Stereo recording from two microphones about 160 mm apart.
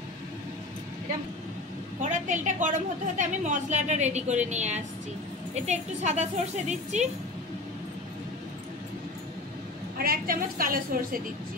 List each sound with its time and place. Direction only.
2.0 s a woman's voice: 50° right (ahead or behind)
9.9 s a woman's voice: 65° right (ahead or behind)